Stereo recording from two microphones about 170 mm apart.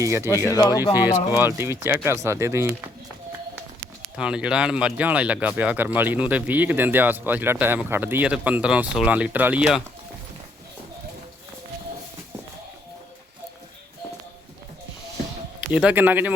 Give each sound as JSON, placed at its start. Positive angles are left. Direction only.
{"t": 0.0, "sound": "speech", "side_deg": -15}
{"t": 0.5, "sound": "speech", "side_deg": 20}
{"t": 1.4, "sound": "speech", "side_deg": -15}
{"t": 4.2, "sound": "speech", "side_deg": -5}
{"t": 15.7, "sound": "speech", "side_deg": -5}